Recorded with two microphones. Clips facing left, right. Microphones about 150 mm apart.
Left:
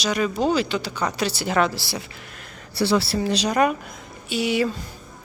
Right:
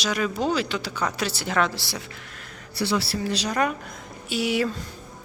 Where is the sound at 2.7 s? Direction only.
30° left (ahead or behind); by 3.8 s 15° left (ahead or behind).